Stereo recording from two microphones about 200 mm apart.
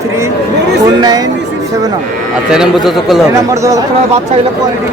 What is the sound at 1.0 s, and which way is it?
Speech, 20° right (ahead or behind).